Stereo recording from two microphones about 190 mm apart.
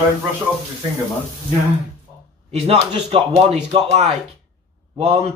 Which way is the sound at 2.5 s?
35° right (ahead or behind).